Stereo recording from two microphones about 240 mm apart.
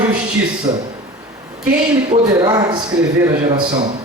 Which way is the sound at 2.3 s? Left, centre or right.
Centre.